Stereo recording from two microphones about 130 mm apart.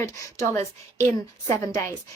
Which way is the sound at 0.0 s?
25° left (ahead or behind).